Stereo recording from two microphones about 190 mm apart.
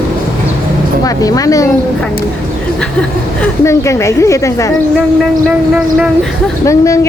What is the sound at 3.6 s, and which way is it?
A woman's voice, 15° left (ahead or behind).